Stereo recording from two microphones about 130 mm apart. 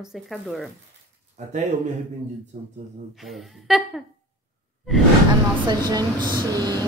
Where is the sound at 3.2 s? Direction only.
Centre (ahead or behind).